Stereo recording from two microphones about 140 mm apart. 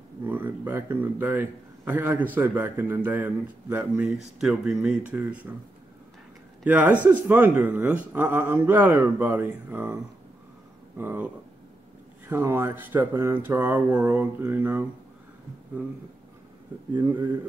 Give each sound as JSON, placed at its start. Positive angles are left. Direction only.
{"t": 0.2, "sound": "speech", "side_deg": -15}
{"t": 6.6, "sound": "speech", "side_deg": -10}
{"t": 11.0, "sound": "speech", "side_deg": -15}
{"t": 12.3, "sound": "speech", "side_deg": -15}